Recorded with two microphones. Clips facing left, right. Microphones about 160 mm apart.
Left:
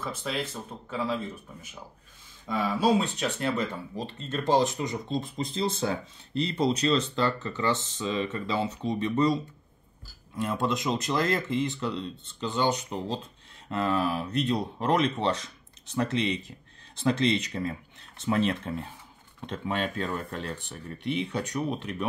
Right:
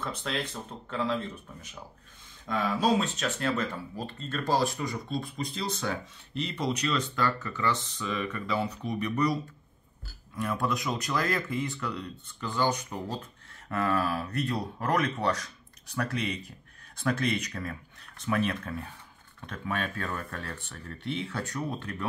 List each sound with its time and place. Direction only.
0.0 s speech: 5° left (ahead or behind)